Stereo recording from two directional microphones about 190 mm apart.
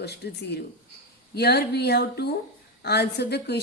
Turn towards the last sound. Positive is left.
turn(degrees=60)  # may be behind; listen again after turning